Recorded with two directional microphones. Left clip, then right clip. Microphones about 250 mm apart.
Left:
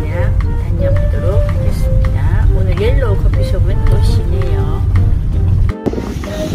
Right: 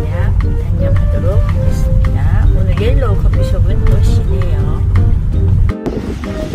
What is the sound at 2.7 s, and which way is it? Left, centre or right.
Speech, centre.